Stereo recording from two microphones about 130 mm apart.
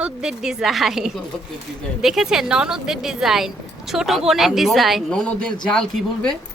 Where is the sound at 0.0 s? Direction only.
5° right (ahead or behind).